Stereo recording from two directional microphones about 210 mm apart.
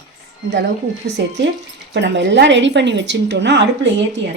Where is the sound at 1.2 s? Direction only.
55° right (ahead or behind).